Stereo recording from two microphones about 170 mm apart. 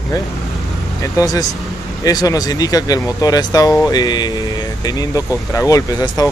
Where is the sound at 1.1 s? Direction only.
20° left (ahead or behind).